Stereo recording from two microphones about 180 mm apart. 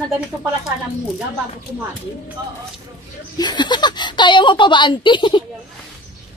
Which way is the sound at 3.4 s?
25° left (ahead or behind).